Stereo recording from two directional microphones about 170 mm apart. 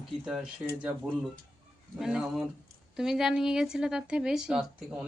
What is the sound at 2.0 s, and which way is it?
Speech, 5° right (ahead or behind).